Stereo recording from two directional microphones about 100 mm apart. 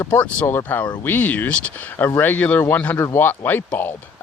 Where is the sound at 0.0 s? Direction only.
20° left (ahead or behind).